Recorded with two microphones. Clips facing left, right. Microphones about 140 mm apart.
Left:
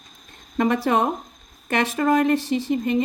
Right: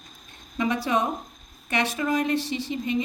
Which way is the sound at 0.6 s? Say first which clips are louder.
Left 5 dB; 55° left (ahead or behind).